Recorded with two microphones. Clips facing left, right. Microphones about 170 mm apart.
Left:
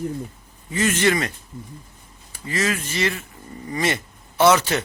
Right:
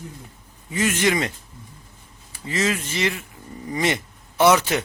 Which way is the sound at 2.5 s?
20° right (ahead or behind).